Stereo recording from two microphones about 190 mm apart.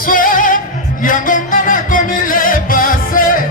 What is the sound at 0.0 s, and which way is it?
Music, 45° left (ahead or behind).